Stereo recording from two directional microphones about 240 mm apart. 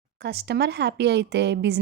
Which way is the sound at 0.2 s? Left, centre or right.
Right.